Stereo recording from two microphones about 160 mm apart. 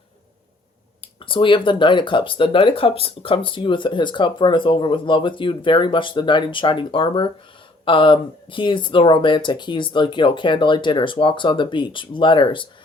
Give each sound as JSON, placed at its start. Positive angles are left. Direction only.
{"t": 1.0, "sound": "speech", "side_deg": 35}